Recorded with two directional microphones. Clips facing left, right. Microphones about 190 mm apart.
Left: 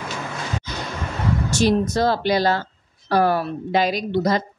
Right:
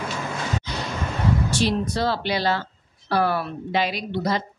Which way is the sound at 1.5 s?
45° left (ahead or behind).